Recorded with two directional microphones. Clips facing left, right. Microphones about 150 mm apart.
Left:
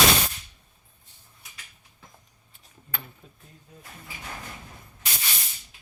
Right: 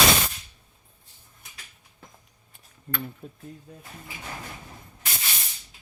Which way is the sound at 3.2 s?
45° right (ahead or behind).